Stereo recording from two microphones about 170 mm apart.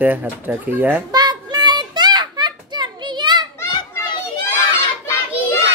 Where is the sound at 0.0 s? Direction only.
10° right (ahead or behind).